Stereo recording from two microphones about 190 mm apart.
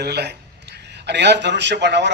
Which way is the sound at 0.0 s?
60° right (ahead or behind).